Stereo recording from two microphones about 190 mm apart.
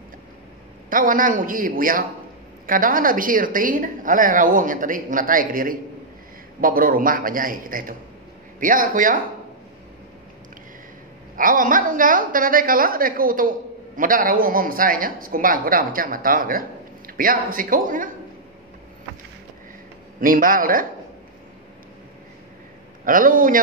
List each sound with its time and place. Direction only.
0.8 s a woman's voice: 45° right (ahead or behind)
11.3 s a woman's voice: 45° right (ahead or behind)
20.2 s a woman's voice: 45° right (ahead or behind)
23.0 s a woman's voice: 45° right (ahead or behind)